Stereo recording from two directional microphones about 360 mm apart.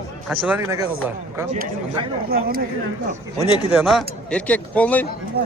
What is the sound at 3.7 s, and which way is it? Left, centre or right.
Speech, centre.